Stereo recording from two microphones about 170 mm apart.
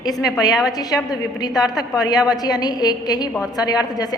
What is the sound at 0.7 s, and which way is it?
Speech, 20° left (ahead or behind).